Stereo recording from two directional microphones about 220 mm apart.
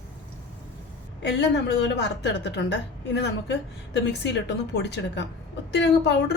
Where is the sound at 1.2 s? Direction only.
50° left (ahead or behind).